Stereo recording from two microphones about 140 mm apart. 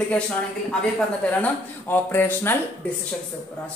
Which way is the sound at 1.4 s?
15° left (ahead or behind).